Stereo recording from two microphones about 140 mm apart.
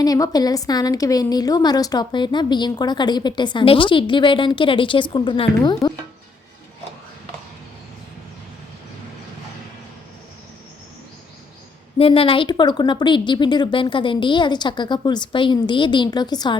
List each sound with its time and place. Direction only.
0.0 s a woman's voice: 25° left (ahead or behind)
11.9 s a woman's voice: 40° left (ahead or behind)